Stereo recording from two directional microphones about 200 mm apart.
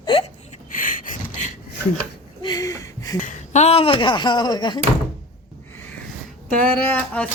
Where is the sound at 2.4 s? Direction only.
20° left (ahead or behind).